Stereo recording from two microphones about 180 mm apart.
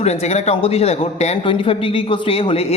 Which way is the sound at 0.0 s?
35° left (ahead or behind).